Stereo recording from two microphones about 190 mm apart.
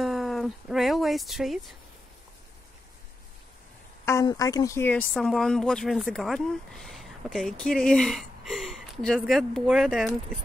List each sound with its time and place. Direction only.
0.0 s music: centre (ahead or behind)
4.0 s speech: 15° left (ahead or behind)
5.1 s speech: centre (ahead or behind)